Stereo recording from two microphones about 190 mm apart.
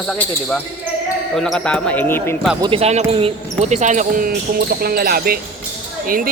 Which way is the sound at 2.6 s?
30° right (ahead or behind).